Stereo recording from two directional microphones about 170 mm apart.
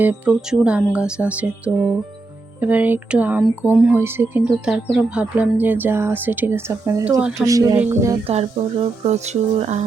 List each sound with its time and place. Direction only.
0.0 s speech: 10° right (ahead or behind)
7.2 s speech: 5° right (ahead or behind)
7.4 s speech: 20° right (ahead or behind)
8.3 s speech: 40° right (ahead or behind)